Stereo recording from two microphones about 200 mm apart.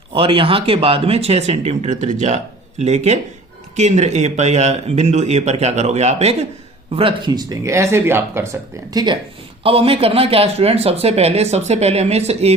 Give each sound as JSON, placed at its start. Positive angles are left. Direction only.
{"t": 0.1, "sound": "speech", "side_deg": -25}